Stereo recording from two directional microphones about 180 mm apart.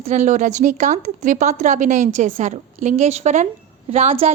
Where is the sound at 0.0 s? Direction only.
40° right (ahead or behind).